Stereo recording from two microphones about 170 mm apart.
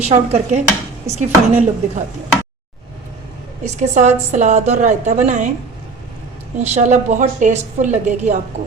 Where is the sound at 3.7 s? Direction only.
40° right (ahead or behind).